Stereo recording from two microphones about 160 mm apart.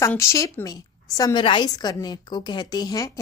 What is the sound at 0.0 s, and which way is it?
A woman's voice, 15° left (ahead or behind).